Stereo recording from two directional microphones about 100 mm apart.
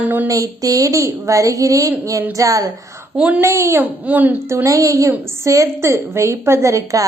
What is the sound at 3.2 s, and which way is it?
Speech, 15° right (ahead or behind).